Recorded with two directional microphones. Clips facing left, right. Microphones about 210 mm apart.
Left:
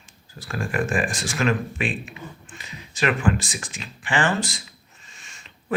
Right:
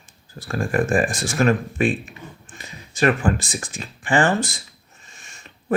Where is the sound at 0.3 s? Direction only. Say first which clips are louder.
Right 4 dB; 45° right (ahead or behind).